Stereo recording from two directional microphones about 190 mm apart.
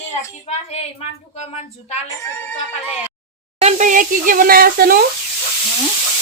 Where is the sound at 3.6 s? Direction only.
40° right (ahead or behind).